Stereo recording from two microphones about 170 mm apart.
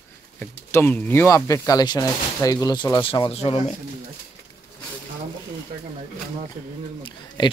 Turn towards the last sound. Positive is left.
turn(degrees=25)  # may be behind; listen again after turning